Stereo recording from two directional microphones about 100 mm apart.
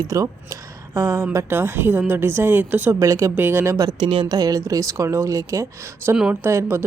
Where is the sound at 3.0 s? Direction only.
35° right (ahead or behind).